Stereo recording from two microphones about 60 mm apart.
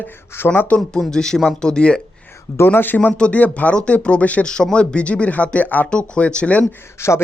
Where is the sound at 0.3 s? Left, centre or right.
Left.